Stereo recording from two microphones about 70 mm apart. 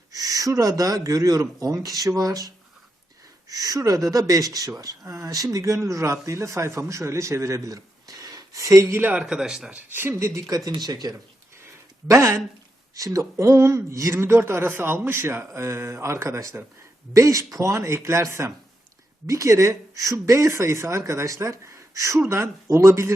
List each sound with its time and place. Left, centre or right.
0.1 s speech: right
3.5 s speech: right
5.0 s speech: right
9.0 s a man's voice: right
9.2 s speech: centre
9.9 s speech: right
10.2 s speech: right
10.5 s speech: right
12.0 s speech: right
12.9 s speech: right